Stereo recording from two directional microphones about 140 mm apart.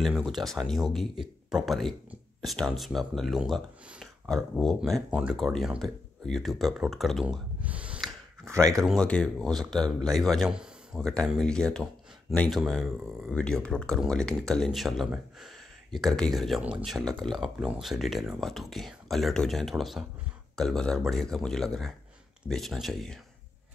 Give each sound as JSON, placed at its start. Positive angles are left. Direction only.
{"t": 0.0, "sound": "speech", "side_deg": 0}
{"t": 7.6, "sound": "gasp", "side_deg": -10}
{"t": 8.5, "sound": "speech", "side_deg": -20}
{"t": 8.8, "sound": "speech", "side_deg": 5}